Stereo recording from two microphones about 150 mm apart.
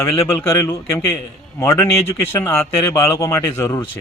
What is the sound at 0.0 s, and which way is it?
A man's voice, 20° left (ahead or behind).